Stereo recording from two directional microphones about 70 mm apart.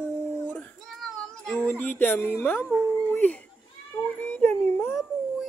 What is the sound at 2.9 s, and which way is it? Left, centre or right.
Dog, left.